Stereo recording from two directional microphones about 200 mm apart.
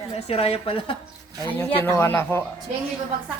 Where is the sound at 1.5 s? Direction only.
10° left (ahead or behind).